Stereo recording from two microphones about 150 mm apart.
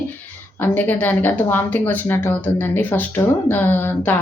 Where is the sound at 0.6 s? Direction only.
15° left (ahead or behind).